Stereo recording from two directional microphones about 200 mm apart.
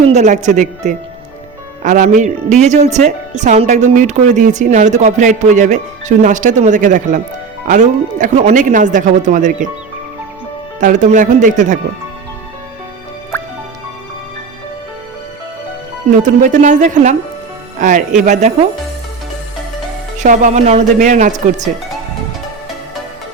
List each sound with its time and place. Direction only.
0.1 s speech: 35° right (ahead or behind)
10.8 s speech: 40° right (ahead or behind)
13.3 s music: 10° left (ahead or behind)
16.2 s speech: 40° right (ahead or behind)
20.1 s speech: 40° right (ahead or behind)